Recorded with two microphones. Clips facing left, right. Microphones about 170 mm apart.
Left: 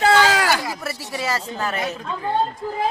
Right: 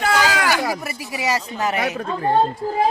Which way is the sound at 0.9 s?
15° right (ahead or behind).